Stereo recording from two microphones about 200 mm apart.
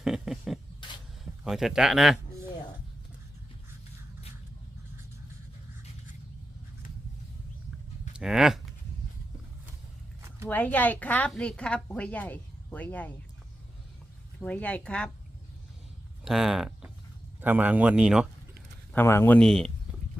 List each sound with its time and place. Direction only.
0.0 s a sound: centre (ahead or behind)
0.8 s a sound: 25° left (ahead or behind)
1.2 s speech: centre (ahead or behind)
8.2 s speech: 5° right (ahead or behind)
10.5 s a woman's voice: 10° left (ahead or behind)
14.4 s speech: 5° left (ahead or behind)
16.2 s speech: centre (ahead or behind)
18.9 s a woman's voice: 10° left (ahead or behind)